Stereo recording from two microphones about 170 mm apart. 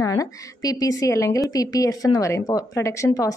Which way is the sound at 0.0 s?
20° left (ahead or behind).